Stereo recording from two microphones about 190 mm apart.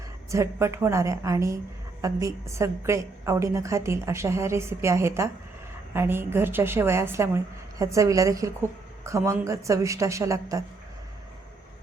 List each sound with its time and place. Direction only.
0.3 s a woman's voice: 15° right (ahead or behind)